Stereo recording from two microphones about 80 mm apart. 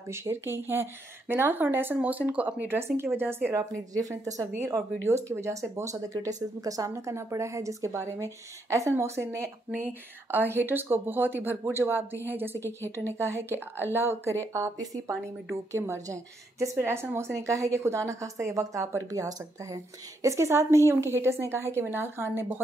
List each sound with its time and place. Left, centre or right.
0.1 s a woman's voice: right
4.1 s a woman's voice: right
4.5 s a woman's voice: right
12.5 s a woman's voice: left
13.2 s a woman's voice: right
15.5 s a woman's voice: right